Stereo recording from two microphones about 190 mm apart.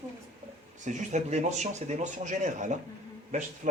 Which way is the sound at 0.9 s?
40° right (ahead or behind).